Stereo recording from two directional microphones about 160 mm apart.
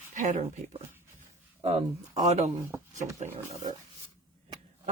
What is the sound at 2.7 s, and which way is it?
Speech, 20° right (ahead or behind).